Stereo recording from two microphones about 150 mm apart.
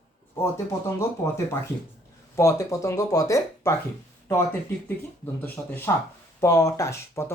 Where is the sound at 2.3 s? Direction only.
20° left (ahead or behind).